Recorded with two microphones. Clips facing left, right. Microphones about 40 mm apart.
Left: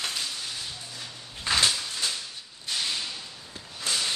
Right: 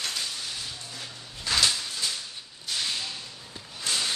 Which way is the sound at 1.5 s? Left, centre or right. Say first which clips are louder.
Left 1 dB; left.